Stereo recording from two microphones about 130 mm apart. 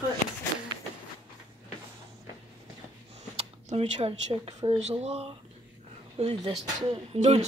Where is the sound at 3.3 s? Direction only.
50° right (ahead or behind).